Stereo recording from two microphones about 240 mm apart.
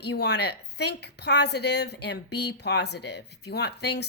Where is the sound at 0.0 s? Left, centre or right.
Left.